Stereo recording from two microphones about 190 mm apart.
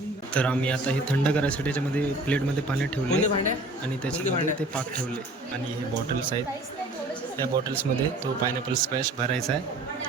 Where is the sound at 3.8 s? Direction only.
5° left (ahead or behind).